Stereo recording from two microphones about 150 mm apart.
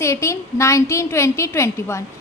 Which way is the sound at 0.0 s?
20° left (ahead or behind).